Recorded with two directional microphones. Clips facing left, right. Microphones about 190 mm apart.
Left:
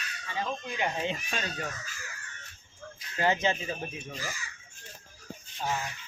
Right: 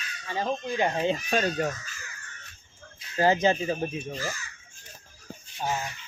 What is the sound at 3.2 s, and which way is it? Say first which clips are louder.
Speech: right 5 dB; 35° right (ahead or behind).